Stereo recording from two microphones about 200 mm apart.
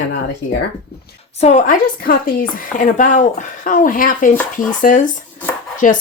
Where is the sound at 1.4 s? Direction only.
35° left (ahead or behind).